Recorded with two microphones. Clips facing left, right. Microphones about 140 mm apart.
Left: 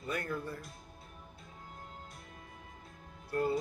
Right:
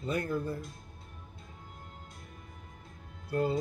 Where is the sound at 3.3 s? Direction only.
20° right (ahead or behind).